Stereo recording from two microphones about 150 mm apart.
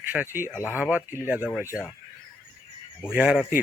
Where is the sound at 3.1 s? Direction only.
5° right (ahead or behind).